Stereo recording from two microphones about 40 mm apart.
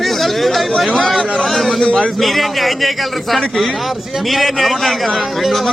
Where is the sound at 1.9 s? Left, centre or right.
Left.